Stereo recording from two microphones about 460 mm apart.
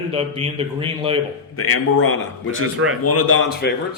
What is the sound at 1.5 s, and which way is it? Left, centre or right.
A man's voice, left.